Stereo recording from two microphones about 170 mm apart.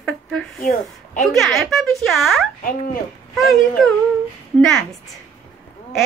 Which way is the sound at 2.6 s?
55° left (ahead or behind).